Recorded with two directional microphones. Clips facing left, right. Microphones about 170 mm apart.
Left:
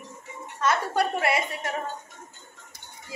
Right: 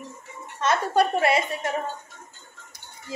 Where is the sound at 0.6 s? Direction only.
20° right (ahead or behind).